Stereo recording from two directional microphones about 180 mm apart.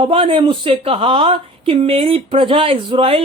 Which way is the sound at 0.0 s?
30° right (ahead or behind).